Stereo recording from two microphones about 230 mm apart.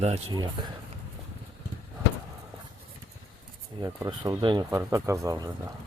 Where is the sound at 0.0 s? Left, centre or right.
Right.